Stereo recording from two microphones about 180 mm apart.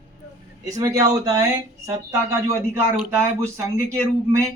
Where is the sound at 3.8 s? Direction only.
15° right (ahead or behind).